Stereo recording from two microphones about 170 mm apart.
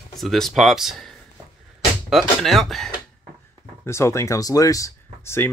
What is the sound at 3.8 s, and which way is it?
Speech, 15° left (ahead or behind).